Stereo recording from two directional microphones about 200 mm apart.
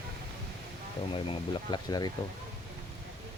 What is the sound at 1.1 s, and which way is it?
Speech, 25° left (ahead or behind).